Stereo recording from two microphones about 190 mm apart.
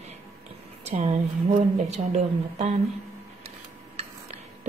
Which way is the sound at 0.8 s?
40° right (ahead or behind).